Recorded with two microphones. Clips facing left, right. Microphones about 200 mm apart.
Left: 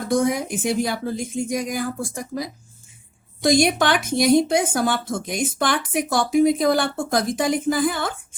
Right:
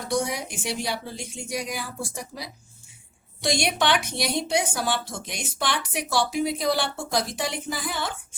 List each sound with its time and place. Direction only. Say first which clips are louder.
0.1 s speech: left 7 dB; 50° left (ahead or behind)